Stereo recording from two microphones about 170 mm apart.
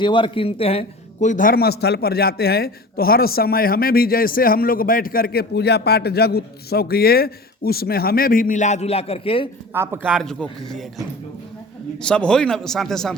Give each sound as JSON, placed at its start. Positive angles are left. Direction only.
{"t": 0.0, "sound": "a man's voice", "side_deg": 30}
{"t": 9.7, "sound": "a man's voice", "side_deg": -15}
{"t": 10.1, "sound": "speech", "side_deg": 0}